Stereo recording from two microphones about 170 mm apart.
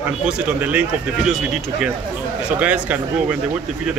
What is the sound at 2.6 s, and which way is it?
Speech, 10° right (ahead or behind).